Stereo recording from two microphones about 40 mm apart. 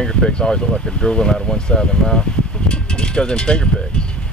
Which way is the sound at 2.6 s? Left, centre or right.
Left.